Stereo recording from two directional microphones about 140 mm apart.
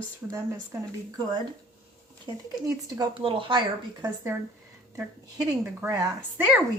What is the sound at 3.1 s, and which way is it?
Speech, 35° right (ahead or behind).